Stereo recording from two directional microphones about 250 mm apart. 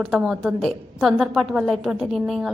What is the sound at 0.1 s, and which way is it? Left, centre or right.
A woman's voice, centre.